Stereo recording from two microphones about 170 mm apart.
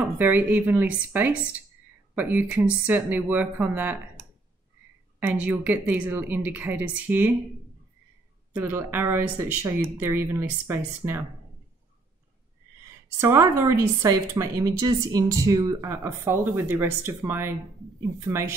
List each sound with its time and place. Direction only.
0.0 s speech: 10° right (ahead or behind)
5.2 s speech: 10° right (ahead or behind)
8.5 s speech: 10° right (ahead or behind)
13.2 s speech: 15° right (ahead or behind)